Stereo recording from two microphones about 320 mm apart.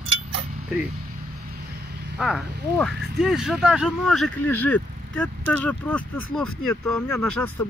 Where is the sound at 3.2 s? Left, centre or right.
Centre.